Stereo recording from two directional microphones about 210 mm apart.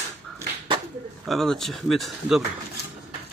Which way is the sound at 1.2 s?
Centre (ahead or behind).